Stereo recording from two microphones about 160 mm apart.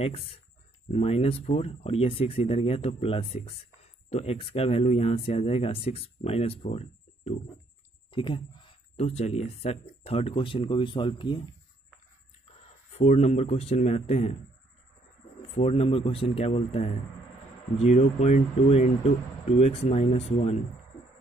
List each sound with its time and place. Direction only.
0.0 s speech: 40° left (ahead or behind)
12.9 s speech: 40° left (ahead or behind)
15.5 s speech: 40° left (ahead or behind)